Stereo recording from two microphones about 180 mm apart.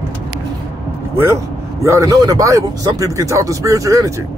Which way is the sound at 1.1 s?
15° right (ahead or behind).